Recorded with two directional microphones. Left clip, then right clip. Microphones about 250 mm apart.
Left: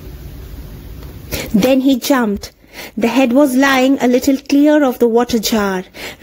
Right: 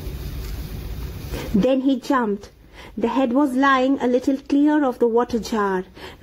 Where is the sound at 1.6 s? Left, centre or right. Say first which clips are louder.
Left 6 dB; left.